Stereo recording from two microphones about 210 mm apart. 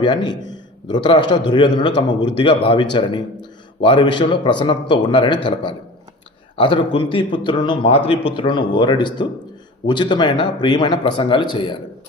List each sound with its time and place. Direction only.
0.0 s speech: 20° left (ahead or behind)
6.6 s speech: 25° left (ahead or behind)